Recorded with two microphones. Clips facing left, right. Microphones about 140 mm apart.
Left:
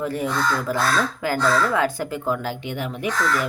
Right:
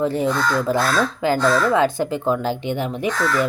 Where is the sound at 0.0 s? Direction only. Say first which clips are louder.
Right 4 dB; 25° right (ahead or behind).